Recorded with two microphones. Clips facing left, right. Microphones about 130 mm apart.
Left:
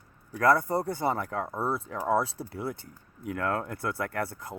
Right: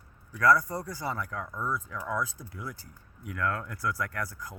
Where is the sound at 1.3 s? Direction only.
35° left (ahead or behind).